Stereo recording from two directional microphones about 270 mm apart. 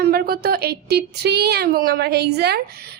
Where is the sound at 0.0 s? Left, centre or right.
Right.